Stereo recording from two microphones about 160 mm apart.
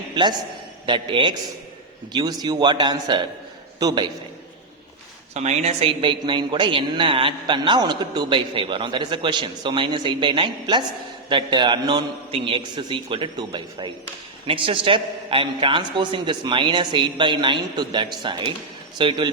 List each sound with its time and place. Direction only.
0.1 s a man's voice: 25° right (ahead or behind)
5.3 s a woman's voice: 45° right (ahead or behind)